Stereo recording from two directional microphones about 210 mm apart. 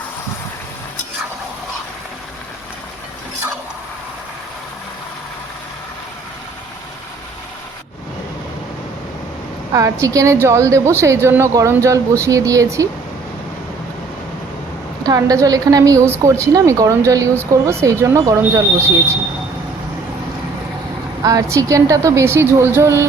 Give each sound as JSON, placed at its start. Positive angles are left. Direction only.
{"t": 9.7, "sound": "a woman's voice", "side_deg": -15}
{"t": 15.0, "sound": "a woman's voice", "side_deg": -15}
{"t": 21.2, "sound": "a woman's voice", "side_deg": -15}